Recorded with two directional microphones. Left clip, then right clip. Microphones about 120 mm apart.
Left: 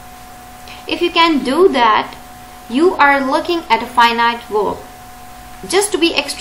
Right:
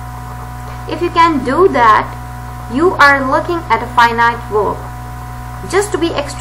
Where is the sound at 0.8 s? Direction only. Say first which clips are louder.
Right 2 dB; 20° left (ahead or behind).